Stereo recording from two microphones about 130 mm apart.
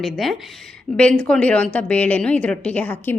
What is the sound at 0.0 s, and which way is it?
A woman's voice, centre (ahead or behind).